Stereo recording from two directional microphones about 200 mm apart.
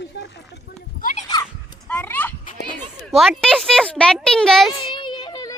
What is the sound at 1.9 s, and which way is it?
A child's voice, 10° left (ahead or behind).